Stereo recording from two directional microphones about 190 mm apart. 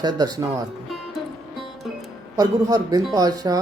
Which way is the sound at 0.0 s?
20° right (ahead or behind).